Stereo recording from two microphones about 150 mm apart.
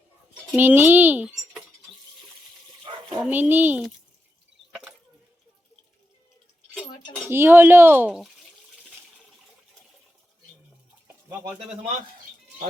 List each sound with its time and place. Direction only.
0.5 s speech: 10° right (ahead or behind)
2.9 s dog: 40° right (ahead or behind)
3.2 s speech: 10° right (ahead or behind)
4.7 s a sound: 5° right (ahead or behind)
7.3 s speech: 15° right (ahead or behind)
8.1 s water: centre (ahead or behind)